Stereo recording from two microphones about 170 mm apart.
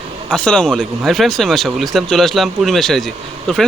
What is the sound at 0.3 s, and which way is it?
Speech, 5° left (ahead or behind).